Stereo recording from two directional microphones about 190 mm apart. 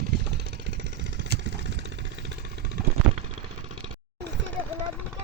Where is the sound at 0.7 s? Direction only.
65° right (ahead or behind).